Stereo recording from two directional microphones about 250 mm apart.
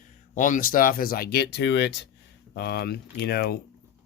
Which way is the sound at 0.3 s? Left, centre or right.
Left.